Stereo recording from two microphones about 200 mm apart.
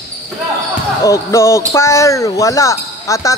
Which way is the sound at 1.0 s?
15° left (ahead or behind).